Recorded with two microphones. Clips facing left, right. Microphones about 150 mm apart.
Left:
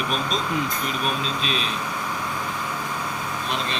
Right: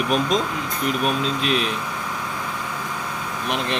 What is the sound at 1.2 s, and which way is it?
Speech, 65° right (ahead or behind).